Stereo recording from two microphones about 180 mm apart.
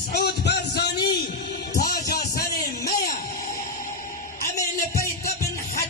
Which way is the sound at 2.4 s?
55° left (ahead or behind).